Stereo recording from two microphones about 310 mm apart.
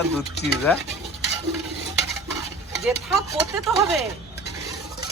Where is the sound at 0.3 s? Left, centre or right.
Left.